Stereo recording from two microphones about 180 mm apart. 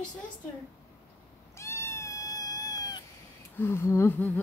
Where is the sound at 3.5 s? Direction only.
10° left (ahead or behind).